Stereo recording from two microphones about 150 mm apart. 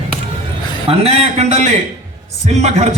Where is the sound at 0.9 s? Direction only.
45° right (ahead or behind).